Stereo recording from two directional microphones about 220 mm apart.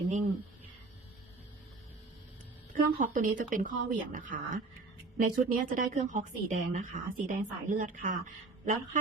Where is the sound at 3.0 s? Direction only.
35° right (ahead or behind).